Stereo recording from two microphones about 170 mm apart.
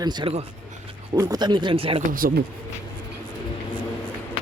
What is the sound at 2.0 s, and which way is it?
Speech, 55° right (ahead or behind).